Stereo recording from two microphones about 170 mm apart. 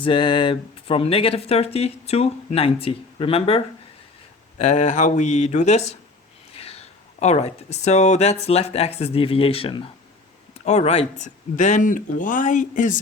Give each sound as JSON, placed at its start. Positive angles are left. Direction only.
{"t": 0.0, "sound": "speech", "side_deg": 30}